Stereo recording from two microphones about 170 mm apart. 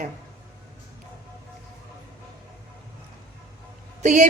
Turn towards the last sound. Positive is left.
turn(degrees=-45)  # may be behind; listen again after turning